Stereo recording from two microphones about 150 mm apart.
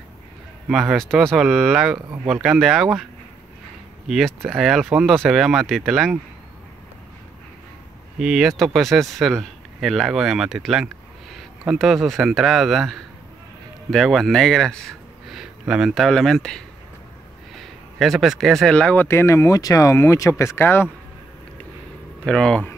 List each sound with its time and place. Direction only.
0.7 s speech: centre (ahead or behind)
4.5 s speech: centre (ahead or behind)
8.2 s speech: 5° right (ahead or behind)
19.0 s speech: 20° left (ahead or behind)
22.2 s speech: 5° left (ahead or behind)